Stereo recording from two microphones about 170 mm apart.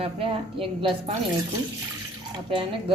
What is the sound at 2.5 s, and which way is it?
Speech, 30° right (ahead or behind).